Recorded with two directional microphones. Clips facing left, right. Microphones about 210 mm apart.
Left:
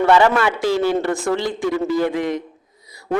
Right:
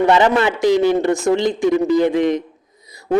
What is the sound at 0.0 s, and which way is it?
A man's voice, 20° right (ahead or behind).